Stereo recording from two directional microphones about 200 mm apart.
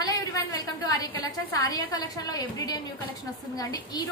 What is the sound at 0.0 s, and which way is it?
A woman's voice, 20° left (ahead or behind).